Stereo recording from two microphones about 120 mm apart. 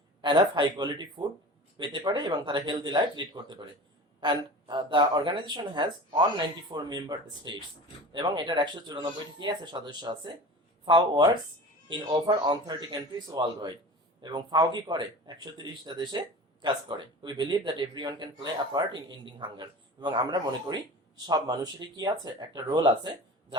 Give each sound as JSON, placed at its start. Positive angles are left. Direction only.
{"t": 0.2, "sound": "speech", "side_deg": -40}